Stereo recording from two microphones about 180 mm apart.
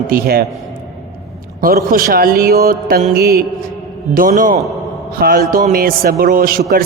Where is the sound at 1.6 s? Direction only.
55° right (ahead or behind).